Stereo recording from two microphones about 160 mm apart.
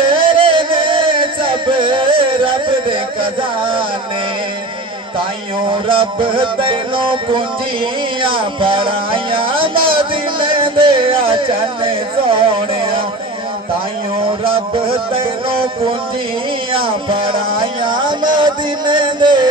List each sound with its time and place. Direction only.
0.0 s music: 30° right (ahead or behind)
5.7 s music: 30° right (ahead or behind)
15.1 s a sound: 35° right (ahead or behind)
16.7 s music: 35° right (ahead or behind)